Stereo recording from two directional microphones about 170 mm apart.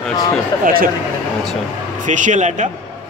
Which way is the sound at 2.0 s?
45° right (ahead or behind).